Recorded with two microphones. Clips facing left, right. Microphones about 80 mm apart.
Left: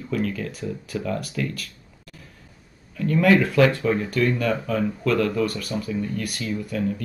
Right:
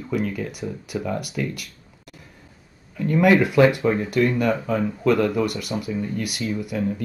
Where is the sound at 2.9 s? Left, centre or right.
Centre.